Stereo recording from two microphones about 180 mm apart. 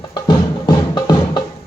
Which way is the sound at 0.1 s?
25° left (ahead or behind).